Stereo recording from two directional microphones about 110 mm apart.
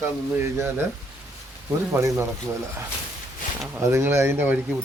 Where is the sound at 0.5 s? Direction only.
20° right (ahead or behind).